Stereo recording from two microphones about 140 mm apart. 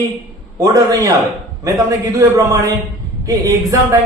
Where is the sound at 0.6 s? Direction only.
25° right (ahead or behind).